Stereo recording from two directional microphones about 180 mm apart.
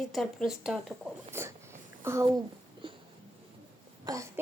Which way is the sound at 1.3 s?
15° right (ahead or behind).